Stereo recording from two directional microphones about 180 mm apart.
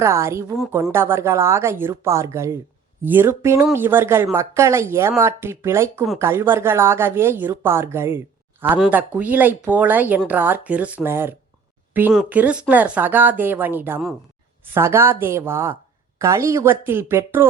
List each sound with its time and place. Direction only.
0.0 s speech: 15° right (ahead or behind)